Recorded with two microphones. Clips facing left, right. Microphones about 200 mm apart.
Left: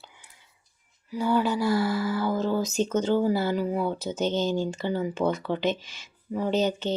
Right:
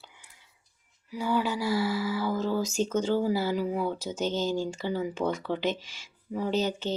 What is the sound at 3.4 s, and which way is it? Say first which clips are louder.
Speech: left 2 dB; 50° left (ahead or behind).